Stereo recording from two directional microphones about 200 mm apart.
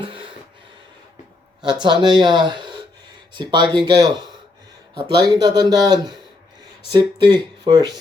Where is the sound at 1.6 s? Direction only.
25° right (ahead or behind).